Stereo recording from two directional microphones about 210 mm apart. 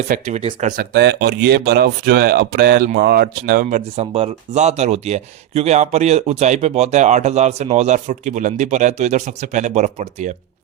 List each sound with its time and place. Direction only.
0.1 s speech: 35° right (ahead or behind)
0.8 s speech: 50° right (ahead or behind); by 10.3 s 35° right (ahead or behind)